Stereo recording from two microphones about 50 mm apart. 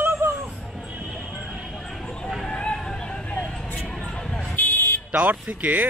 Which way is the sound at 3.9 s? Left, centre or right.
Centre.